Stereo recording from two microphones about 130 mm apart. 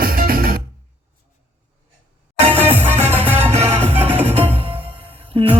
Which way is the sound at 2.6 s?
15° right (ahead or behind).